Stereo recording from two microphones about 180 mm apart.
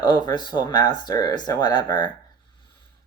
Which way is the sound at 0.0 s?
25° left (ahead or behind).